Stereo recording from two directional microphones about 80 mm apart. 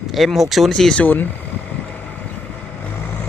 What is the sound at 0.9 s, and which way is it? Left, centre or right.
Speech, left.